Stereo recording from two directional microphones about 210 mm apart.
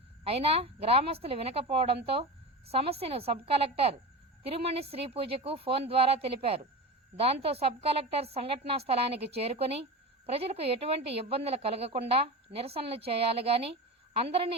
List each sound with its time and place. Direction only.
0.3 s a woman's voice: 25° right (ahead or behind)